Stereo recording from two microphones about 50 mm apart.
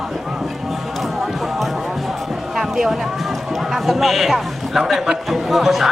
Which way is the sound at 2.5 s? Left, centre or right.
Centre.